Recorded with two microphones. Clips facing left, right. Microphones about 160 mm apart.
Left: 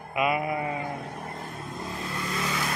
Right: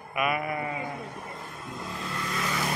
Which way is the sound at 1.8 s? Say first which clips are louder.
Left 1 dB; 20° left (ahead or behind).